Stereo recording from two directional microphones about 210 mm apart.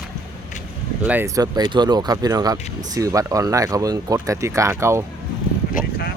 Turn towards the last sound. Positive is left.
turn(degrees=40)  # may be behind; listen again after turning